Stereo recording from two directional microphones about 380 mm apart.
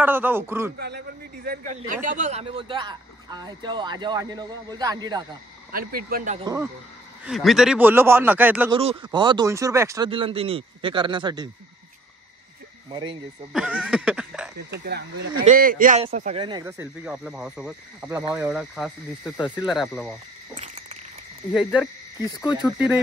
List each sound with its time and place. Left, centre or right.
0.0 s speech: centre
0.7 s speech: right
5.7 s speech: right
12.9 s speech: centre
13.5 s speech: centre
14.7 s speech: right; by 20.2 s centre
20.5 s a sound: centre
22.7 s speech: centre